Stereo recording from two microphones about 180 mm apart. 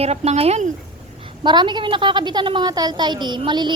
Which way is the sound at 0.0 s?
35° right (ahead or behind).